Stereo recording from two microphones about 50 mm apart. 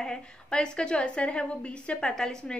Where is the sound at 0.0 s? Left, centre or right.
Centre.